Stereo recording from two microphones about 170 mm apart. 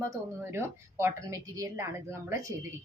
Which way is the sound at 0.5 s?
15° right (ahead or behind).